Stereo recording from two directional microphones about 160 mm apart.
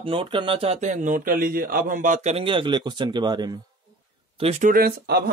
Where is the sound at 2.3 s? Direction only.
35° right (ahead or behind).